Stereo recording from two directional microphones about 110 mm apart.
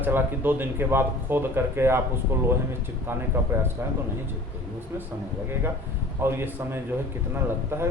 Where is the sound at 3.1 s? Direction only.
20° right (ahead or behind).